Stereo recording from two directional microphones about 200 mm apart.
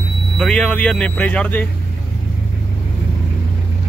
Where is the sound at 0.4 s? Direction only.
5° left (ahead or behind).